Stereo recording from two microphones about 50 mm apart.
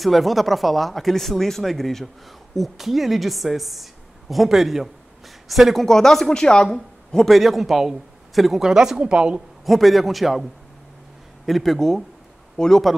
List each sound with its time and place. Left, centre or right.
0.0 s a woman's voice: centre
5.9 s speech: centre
7.2 s a woman's voice: centre
9.7 s a woman's voice: centre
11.4 s a woman's voice: centre